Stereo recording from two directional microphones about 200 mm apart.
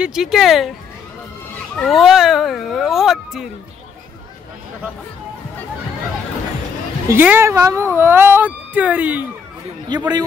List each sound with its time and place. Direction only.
0.0 s speech: 5° right (ahead or behind)
1.8 s speech: centre (ahead or behind)
7.1 s speech: 10° right (ahead or behind)
9.8 s a man's voice: 20° right (ahead or behind)